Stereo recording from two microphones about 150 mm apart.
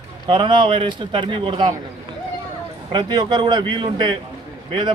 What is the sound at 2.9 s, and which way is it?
A man's voice, 30° right (ahead or behind).